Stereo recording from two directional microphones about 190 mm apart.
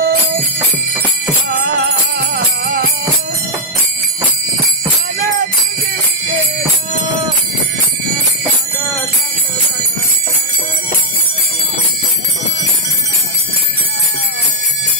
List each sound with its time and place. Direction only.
0.0 s music: 55° right (ahead or behind)
1.5 s music: 55° right (ahead or behind)
5.2 s jingle bell: 45° right (ahead or behind)